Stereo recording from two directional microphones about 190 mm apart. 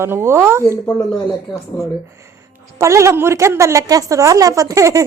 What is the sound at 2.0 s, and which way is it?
A woman's voice, 15° right (ahead or behind).